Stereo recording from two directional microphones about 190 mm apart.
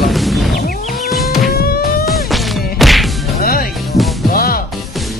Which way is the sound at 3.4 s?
50° left (ahead or behind).